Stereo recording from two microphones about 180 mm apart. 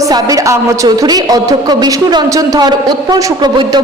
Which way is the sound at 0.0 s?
20° right (ahead or behind).